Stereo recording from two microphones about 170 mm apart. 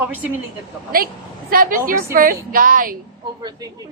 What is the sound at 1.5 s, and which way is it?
A woman's voice, 55° right (ahead or behind).